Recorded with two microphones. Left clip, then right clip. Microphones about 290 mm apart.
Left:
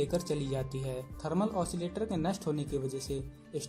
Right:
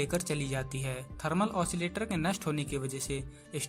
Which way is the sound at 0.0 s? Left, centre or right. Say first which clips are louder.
Left 1 dB; right.